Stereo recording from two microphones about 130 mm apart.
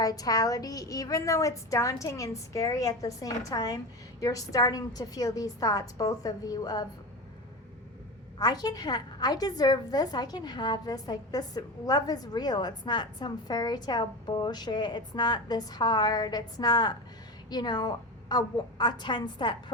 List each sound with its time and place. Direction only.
0.0 s a woman's voice: 30° left (ahead or behind)
8.4 s a woman's voice: 30° left (ahead or behind)